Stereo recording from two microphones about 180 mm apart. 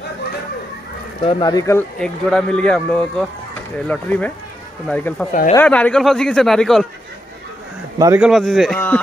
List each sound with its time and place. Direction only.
1.2 s speech: 25° left (ahead or behind)
2.0 s speech: 5° left (ahead or behind)
8.2 s speech: centre (ahead or behind)